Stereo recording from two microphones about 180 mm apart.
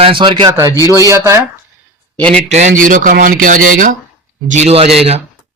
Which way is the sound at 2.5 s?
40° right (ahead or behind).